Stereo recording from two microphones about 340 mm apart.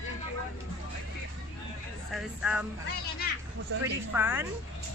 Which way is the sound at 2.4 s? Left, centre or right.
Centre.